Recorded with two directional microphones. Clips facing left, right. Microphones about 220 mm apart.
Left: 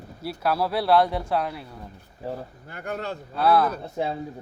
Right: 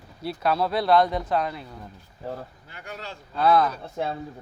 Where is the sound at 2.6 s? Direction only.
55° left (ahead or behind).